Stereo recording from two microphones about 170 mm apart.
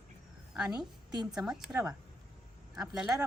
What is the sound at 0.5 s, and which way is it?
A woman's voice, 5° right (ahead or behind).